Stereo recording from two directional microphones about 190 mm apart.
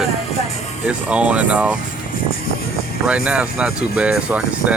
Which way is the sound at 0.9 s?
5° right (ahead or behind).